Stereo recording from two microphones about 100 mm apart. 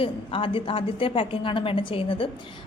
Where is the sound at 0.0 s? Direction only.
60° left (ahead or behind).